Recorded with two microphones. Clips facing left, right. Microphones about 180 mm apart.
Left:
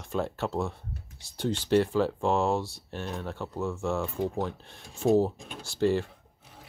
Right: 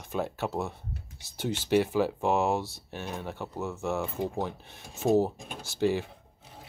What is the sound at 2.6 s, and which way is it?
Speech, centre (ahead or behind).